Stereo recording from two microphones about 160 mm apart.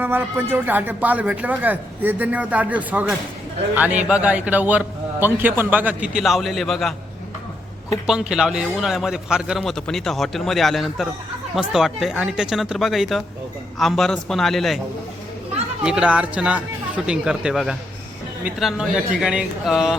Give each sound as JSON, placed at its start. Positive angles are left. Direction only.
{"t": 0.0, "sound": "a man's voice", "side_deg": -15}
{"t": 8.0, "sound": "a man's voice", "side_deg": -5}
{"t": 15.8, "sound": "a man's voice", "side_deg": -5}